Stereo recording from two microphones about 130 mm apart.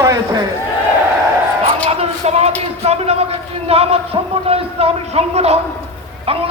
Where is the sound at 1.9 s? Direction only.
55° right (ahead or behind).